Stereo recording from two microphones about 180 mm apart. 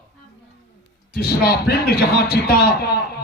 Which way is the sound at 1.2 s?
60° left (ahead or behind).